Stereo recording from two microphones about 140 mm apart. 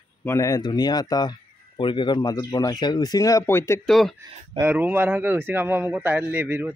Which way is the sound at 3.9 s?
Centre (ahead or behind).